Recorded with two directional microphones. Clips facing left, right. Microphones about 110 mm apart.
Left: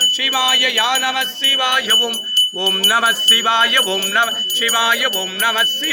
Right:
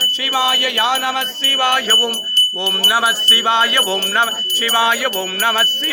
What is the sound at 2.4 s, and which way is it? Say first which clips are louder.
Jingle bell: right 2 dB; 10° left (ahead or behind).